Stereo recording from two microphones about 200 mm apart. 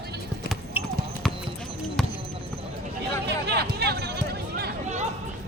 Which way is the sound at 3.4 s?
55° right (ahead or behind).